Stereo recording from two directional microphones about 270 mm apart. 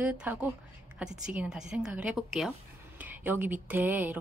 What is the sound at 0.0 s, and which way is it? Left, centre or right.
A woman's voice, centre.